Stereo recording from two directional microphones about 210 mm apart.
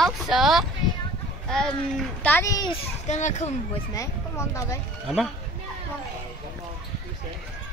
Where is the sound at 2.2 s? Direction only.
10° left (ahead or behind).